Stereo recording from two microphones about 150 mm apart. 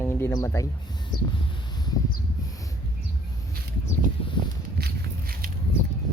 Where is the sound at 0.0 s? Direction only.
20° left (ahead or behind).